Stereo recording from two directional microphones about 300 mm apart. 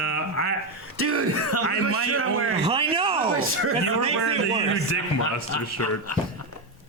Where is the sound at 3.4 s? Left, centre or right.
Right.